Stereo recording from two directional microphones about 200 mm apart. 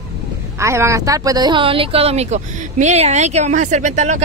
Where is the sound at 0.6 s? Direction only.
15° right (ahead or behind).